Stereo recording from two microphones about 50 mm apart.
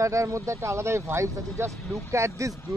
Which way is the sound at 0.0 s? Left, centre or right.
Right.